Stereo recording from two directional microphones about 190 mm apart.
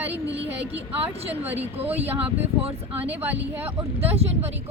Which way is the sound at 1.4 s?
10° right (ahead or behind).